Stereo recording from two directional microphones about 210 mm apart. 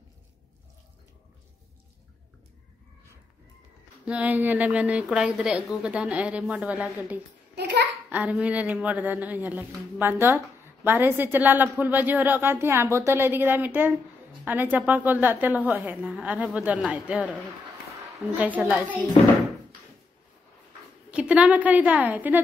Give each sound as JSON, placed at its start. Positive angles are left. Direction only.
{"t": 4.0, "sound": "a woman's voice", "side_deg": -5}
{"t": 7.5, "sound": "a sound", "side_deg": -50}
{"t": 8.1, "sound": "speech", "side_deg": -5}
{"t": 18.3, "sound": "speech", "side_deg": -5}
{"t": 21.1, "sound": "speech", "side_deg": -5}